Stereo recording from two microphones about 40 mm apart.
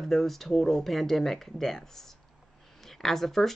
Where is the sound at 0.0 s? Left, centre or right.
Centre.